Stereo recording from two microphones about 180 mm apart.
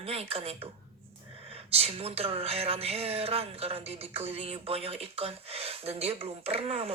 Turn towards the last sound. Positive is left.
turn(degrees=-35)  # may be behind; listen again after turning